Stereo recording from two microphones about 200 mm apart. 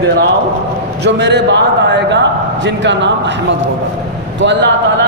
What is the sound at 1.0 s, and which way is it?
A man's voice, 60° right (ahead or behind).